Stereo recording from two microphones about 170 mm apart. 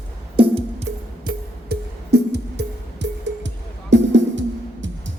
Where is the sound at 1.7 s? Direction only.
75° right (ahead or behind).